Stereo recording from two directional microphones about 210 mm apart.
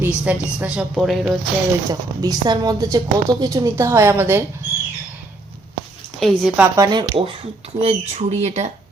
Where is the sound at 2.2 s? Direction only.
20° right (ahead or behind).